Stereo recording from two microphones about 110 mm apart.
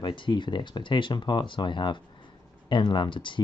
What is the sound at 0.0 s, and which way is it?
Speech, 45° left (ahead or behind).